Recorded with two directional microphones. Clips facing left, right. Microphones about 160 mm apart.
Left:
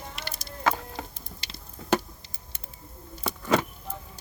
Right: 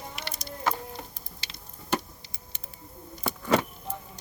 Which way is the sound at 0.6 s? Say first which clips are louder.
Left 3 dB; 90° left.